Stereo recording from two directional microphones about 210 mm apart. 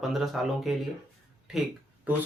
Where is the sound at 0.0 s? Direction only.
Centre (ahead or behind).